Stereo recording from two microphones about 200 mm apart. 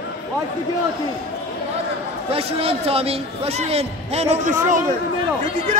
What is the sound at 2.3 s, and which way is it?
A man's voice, 30° right (ahead or behind).